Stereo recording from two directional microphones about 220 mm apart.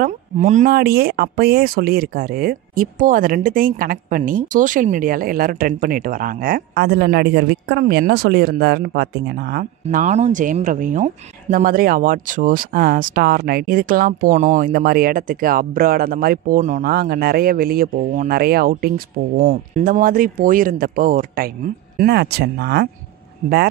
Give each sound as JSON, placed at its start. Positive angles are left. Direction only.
{"t": 0.0, "sound": "speech", "side_deg": -35}